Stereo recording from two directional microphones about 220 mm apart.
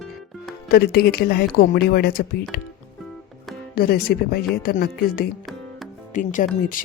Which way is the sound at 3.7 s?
45° left (ahead or behind).